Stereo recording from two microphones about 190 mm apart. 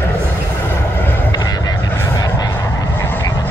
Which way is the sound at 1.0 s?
15° left (ahead or behind).